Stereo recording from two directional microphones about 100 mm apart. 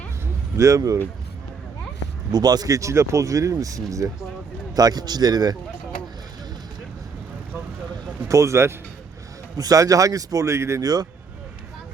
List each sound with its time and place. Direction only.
0.5 s speech: 30° right (ahead or behind)
2.3 s speech: 40° right (ahead or behind)
8.3 s speech: 30° right (ahead or behind)